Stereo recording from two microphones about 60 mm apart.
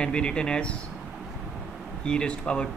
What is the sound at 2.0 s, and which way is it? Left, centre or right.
Speech, centre.